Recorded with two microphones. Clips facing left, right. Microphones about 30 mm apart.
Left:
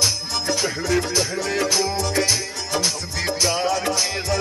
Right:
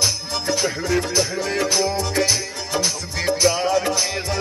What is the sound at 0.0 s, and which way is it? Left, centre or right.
Music, centre.